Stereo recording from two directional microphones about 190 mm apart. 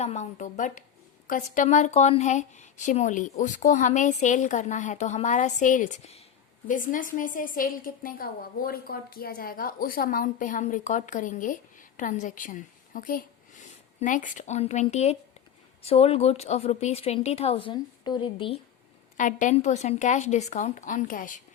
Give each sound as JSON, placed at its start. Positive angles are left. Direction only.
{"t": 0.0, "sound": "a woman's voice", "side_deg": 35}
{"t": 19.1, "sound": "a woman's voice", "side_deg": 40}